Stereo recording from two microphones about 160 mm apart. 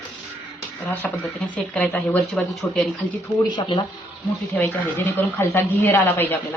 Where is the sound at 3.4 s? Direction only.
30° left (ahead or behind).